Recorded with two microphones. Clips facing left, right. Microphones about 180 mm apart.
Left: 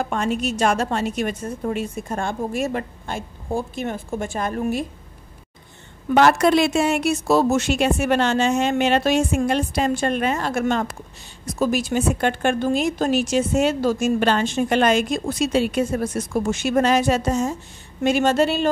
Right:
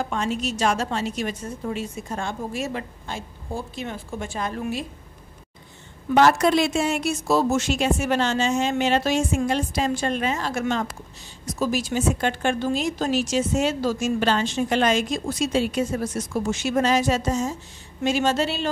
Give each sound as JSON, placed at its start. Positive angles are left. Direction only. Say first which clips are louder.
{"t": 0.0, "sound": "a woman's voice", "louder": "left 3 dB", "side_deg": 55}
{"t": 6.1, "sound": "a woman's voice", "louder": "left 2 dB", "side_deg": 65}